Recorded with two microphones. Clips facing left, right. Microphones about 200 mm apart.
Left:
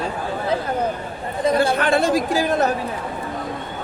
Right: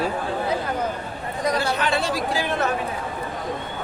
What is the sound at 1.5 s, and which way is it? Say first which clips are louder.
Speech: left 7 dB; 50° left (ahead or behind).